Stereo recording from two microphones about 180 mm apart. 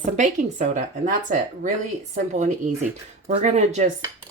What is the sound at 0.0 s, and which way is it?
Speech, 40° right (ahead or behind).